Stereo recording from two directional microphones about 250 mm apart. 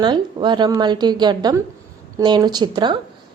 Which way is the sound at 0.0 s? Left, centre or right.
Centre.